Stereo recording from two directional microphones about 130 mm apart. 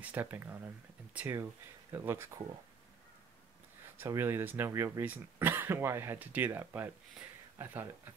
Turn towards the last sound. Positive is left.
turn(degrees=-15)  # may be behind; listen again after turning